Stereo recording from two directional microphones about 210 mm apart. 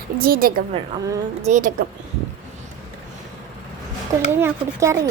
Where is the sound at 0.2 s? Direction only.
45° right (ahead or behind).